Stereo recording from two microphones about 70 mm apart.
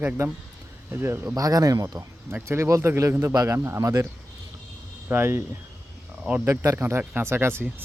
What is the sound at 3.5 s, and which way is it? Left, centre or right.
Speech, right.